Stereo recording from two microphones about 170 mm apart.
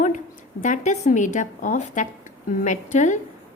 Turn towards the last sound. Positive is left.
turn(degrees=45)  # may be behind; listen again after turning